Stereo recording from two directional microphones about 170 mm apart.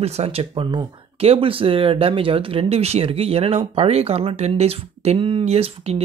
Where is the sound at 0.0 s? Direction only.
35° right (ahead or behind).